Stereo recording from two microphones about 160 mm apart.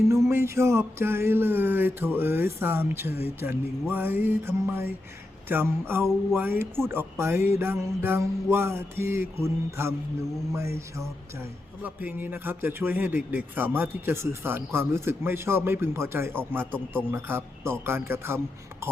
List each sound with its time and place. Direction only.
0.1 s speech: 15° right (ahead or behind)
11.8 s speech: 10° right (ahead or behind)